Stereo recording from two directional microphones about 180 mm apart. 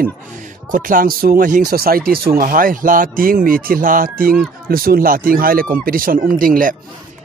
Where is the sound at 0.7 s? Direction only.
50° right (ahead or behind).